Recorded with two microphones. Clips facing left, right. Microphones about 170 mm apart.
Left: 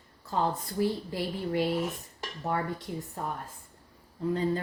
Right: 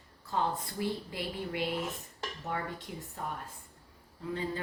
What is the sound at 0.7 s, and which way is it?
Speech, 40° left (ahead or behind).